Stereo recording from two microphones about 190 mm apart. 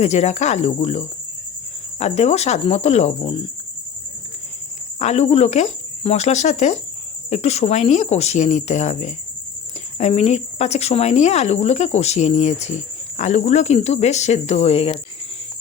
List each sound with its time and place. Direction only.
0.0 s speech: 35° left (ahead or behind)
4.9 s speech: 35° left (ahead or behind)